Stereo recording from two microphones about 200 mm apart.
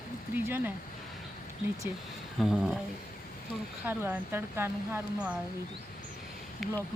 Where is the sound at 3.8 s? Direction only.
10° right (ahead or behind).